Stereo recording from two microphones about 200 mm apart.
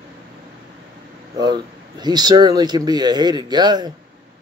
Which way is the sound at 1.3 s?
20° right (ahead or behind).